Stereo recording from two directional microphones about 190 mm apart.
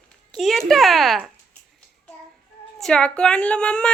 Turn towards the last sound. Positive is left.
turn(degrees=5)  # may be behind; listen again after turning